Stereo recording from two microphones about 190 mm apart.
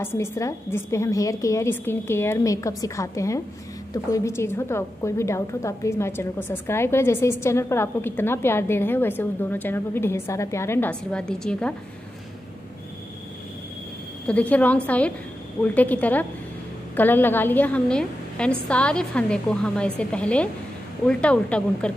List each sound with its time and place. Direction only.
0.0 s a woman's voice: 15° left (ahead or behind)
14.2 s a woman's voice: 10° left (ahead or behind)